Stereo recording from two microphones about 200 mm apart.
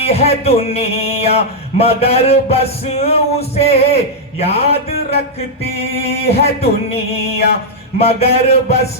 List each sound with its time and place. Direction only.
0.0 s music: 30° left (ahead or behind)